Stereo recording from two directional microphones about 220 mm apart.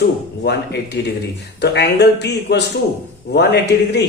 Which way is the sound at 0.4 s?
50° left (ahead or behind).